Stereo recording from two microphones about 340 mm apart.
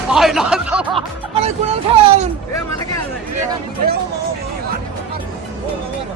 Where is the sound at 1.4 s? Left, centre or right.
Centre.